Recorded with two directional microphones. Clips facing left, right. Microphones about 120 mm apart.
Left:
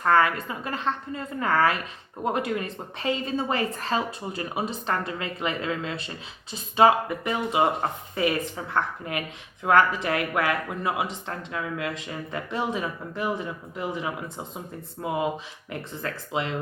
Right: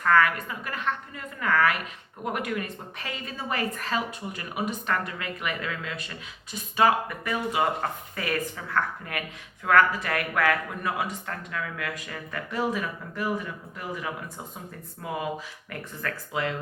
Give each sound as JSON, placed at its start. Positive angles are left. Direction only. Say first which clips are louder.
{"t": 0.0, "sound": "a woman's voice", "louder": "left 1 dB", "side_deg": 30}